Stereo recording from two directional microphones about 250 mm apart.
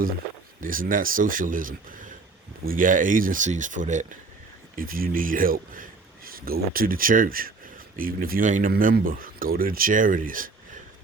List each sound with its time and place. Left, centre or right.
0.6 s a man's voice: right